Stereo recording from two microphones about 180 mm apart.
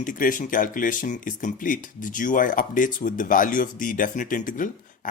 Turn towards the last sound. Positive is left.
turn(degrees=45)  # may be behind; listen again after turning